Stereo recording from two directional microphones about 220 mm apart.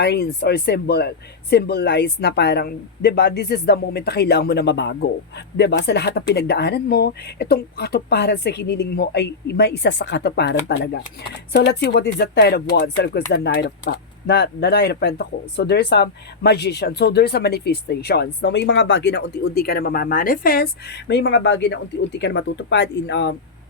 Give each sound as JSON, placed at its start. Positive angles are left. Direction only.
{"t": 0.0, "sound": "speech", "side_deg": 45}
{"t": 21.1, "sound": "speech", "side_deg": 55}